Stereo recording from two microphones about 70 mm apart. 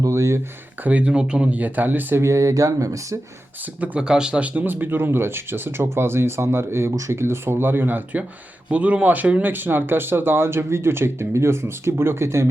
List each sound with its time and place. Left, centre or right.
0.1 s speech: right
0.9 s speech: centre
2.2 s speech: right
3.8 s speech: centre; by 12.5 s right